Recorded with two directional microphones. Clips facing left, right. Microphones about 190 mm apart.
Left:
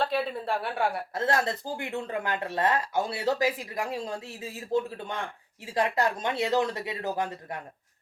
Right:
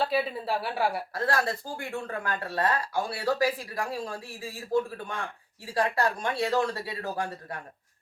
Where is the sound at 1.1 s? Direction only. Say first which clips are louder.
Left 1 dB; 20° left (ahead or behind).